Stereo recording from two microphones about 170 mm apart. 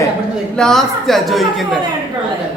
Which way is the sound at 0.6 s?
Centre (ahead or behind).